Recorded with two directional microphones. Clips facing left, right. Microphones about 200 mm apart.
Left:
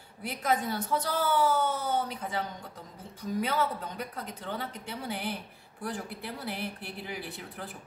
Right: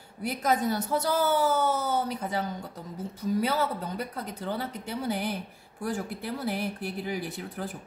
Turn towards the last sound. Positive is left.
turn(degrees=-45)  # may be behind; listen again after turning